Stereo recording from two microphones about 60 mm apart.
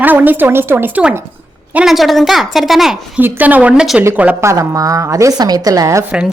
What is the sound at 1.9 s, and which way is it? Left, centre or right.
Speech, centre.